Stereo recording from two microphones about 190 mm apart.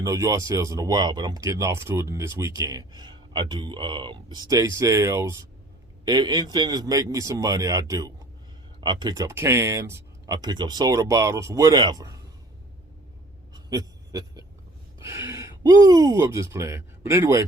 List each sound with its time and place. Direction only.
0.0 s a man's voice: 15° right (ahead or behind)
13.5 s a sound: 20° right (ahead or behind)
14.9 s speech: 15° right (ahead or behind)